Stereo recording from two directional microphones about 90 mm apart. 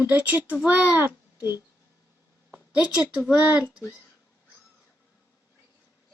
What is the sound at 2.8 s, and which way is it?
Speech, 10° right (ahead or behind).